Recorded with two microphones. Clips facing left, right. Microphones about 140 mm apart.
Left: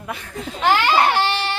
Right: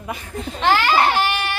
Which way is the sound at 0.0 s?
10° right (ahead or behind).